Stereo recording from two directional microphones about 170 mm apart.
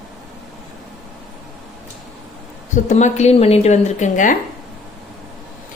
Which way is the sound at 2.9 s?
40° left (ahead or behind).